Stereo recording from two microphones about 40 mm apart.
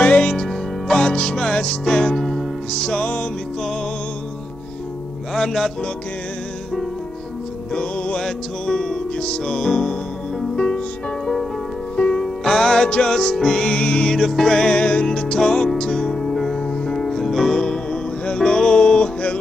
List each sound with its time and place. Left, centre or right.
0.0 s music: left
0.3 s music: centre
1.0 s music: left
5.3 s music: centre
7.7 s music: left
8.2 s music: centre
12.0 s music: left
14.1 s music: centre
16.2 s music: centre
16.6 s music: left
17.0 s music: centre